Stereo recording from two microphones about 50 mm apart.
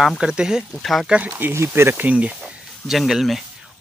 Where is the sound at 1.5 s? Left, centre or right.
Right.